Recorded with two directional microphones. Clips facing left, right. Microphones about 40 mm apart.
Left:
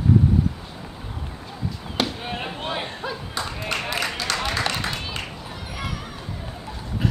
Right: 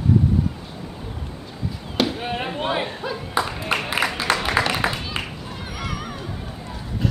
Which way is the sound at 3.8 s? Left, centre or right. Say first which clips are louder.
Right 5 dB; centre.